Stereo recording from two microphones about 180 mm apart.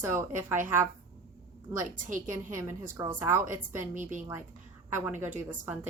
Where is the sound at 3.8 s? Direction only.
45° right (ahead or behind).